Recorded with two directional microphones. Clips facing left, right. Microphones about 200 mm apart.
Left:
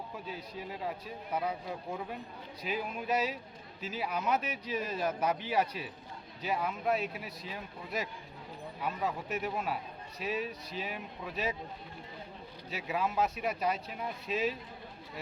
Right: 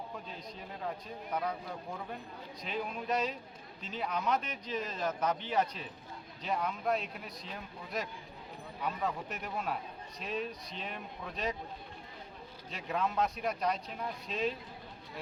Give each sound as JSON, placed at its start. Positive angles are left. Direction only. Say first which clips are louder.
{"t": 0.3, "sound": "a man's voice", "louder": "left 4 dB", "side_deg": 5}
{"t": 12.7, "sound": "speech", "louder": "left 1 dB", "side_deg": 5}